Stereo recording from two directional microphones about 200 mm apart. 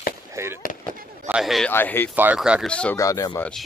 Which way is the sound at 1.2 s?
5° right (ahead or behind).